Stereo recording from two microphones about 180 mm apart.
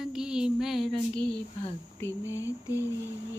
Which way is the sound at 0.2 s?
5° right (ahead or behind).